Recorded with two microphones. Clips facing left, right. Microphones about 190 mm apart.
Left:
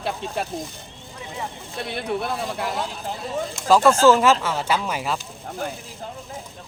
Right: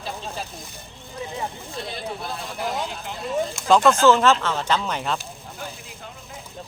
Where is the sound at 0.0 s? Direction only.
60° left (ahead or behind).